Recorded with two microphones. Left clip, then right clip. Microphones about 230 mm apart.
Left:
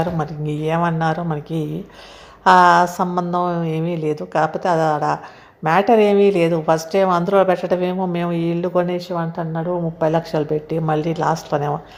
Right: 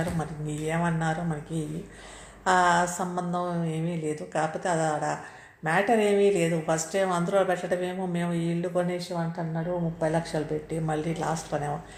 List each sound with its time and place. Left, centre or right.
0.2 s speech: left